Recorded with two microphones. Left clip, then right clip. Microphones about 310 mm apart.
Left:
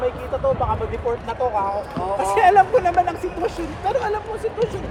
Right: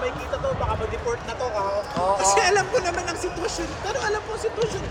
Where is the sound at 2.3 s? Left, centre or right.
Centre.